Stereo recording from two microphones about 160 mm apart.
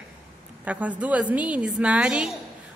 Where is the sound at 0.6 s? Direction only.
10° right (ahead or behind).